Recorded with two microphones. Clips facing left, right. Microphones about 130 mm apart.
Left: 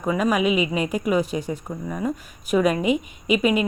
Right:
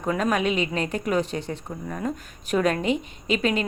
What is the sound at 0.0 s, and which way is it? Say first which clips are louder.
A woman's voice: left 3 dB; 5° left (ahead or behind).